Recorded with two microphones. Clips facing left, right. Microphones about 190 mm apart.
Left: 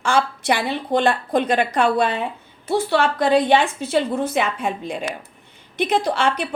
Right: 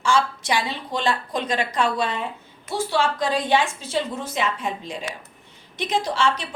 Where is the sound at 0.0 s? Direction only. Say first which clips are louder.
Left 2 dB; 60° left (ahead or behind).